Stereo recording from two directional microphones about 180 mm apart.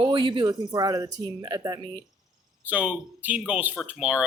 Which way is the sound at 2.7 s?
10° right (ahead or behind).